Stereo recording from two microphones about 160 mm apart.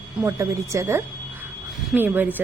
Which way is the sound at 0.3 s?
20° right (ahead or behind).